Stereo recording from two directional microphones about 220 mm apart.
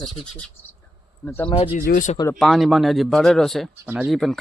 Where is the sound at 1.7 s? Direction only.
40° left (ahead or behind).